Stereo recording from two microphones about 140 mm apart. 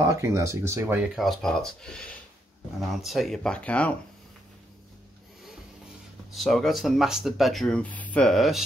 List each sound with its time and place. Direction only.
0.2 s speech: 20° right (ahead or behind)
1.1 s speech: centre (ahead or behind)
6.3 s speech: centre (ahead or behind)